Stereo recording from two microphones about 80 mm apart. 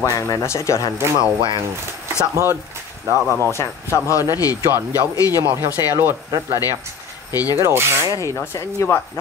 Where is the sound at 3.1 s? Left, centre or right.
Right.